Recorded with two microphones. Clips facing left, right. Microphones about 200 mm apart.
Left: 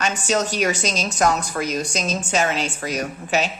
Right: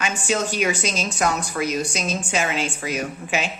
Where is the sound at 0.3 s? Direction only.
40° left (ahead or behind).